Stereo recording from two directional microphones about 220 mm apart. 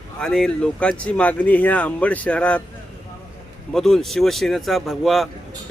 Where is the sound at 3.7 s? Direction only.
Centre (ahead or behind).